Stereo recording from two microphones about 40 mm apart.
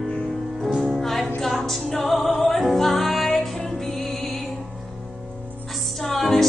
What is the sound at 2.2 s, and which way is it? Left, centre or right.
Music, left.